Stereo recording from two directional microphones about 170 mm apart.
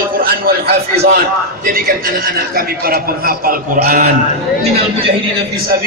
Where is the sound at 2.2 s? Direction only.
60° right (ahead or behind).